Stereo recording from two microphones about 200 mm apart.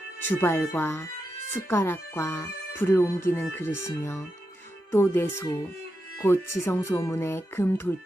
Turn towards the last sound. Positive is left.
turn(degrees=10)  # may be behind; listen again after turning